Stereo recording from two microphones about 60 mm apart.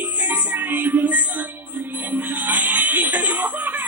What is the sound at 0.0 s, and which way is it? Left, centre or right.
Music, right.